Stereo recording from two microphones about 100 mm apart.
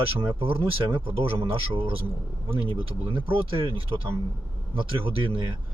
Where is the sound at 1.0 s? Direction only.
65° right (ahead or behind).